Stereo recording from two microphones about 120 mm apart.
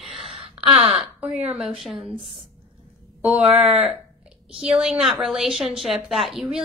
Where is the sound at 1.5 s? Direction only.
Centre (ahead or behind).